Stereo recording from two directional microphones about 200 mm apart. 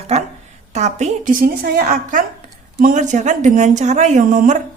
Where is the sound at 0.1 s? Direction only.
30° right (ahead or behind).